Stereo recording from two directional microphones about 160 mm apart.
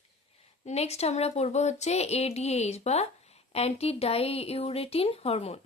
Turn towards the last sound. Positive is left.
turn(degrees=40)  # may be behind; listen again after turning